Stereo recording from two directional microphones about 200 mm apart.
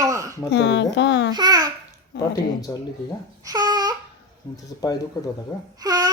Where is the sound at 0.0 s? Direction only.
15° right (ahead or behind).